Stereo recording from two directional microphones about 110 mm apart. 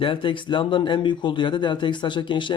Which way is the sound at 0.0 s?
50° left (ahead or behind).